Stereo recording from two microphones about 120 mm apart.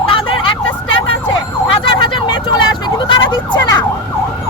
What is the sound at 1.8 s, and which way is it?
Emergency vehicle, 45° left (ahead or behind).